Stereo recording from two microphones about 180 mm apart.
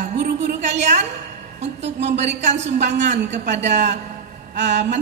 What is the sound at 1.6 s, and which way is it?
A woman's voice, 40° right (ahead or behind).